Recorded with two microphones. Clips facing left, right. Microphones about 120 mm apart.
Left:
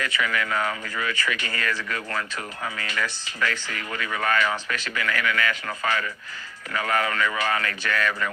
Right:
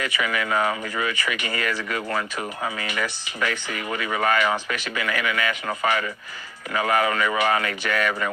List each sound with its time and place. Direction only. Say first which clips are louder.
0.0 s speech: right 1 dB; 15° right (ahead or behind)